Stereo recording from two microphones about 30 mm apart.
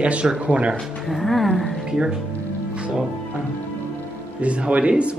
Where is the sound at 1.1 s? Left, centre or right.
Centre.